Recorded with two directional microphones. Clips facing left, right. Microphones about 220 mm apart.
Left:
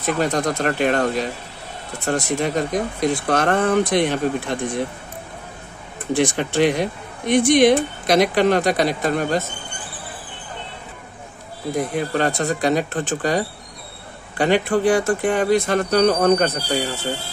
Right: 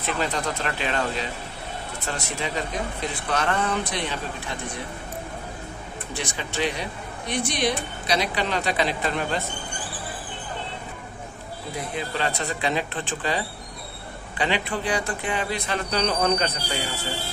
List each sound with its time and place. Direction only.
0.0 s speech: 45° left (ahead or behind)
6.1 s speech: 55° left (ahead or behind)
11.7 s speech: 50° left (ahead or behind)